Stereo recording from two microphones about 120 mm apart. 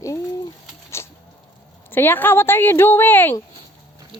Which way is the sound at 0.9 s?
20° left (ahead or behind).